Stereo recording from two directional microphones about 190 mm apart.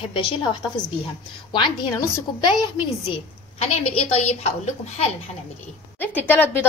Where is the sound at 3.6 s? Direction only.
35° left (ahead or behind).